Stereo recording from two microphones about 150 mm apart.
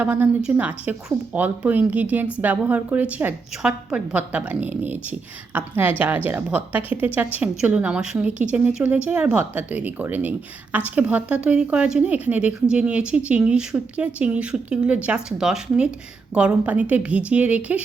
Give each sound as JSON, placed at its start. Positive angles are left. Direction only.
{"t": 0.0, "sound": "a woman's voice", "side_deg": -10}